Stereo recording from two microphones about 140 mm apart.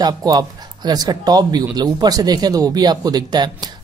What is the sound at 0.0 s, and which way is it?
Speech, 30° right (ahead or behind).